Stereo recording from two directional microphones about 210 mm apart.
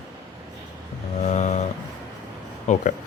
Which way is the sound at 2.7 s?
35° left (ahead or behind).